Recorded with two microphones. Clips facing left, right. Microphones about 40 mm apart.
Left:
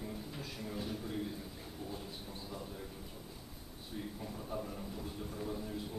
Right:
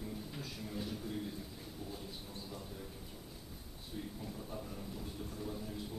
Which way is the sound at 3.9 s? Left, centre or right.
Centre.